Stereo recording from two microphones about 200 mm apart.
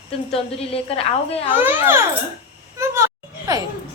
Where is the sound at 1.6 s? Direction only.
10° right (ahead or behind).